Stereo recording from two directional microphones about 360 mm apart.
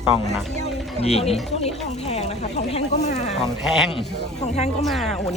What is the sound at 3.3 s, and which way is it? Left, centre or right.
Speech, centre.